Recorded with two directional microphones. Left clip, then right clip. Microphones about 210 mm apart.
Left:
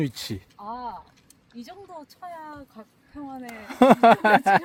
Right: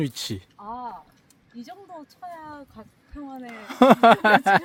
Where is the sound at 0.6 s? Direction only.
45° left (ahead or behind).